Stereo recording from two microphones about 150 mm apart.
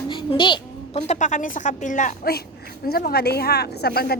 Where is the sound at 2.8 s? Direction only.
90° left.